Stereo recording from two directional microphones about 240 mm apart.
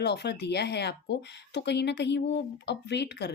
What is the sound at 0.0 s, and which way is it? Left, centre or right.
Speech, left.